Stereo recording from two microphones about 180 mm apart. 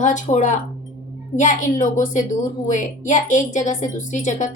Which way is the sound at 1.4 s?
45° left (ahead or behind).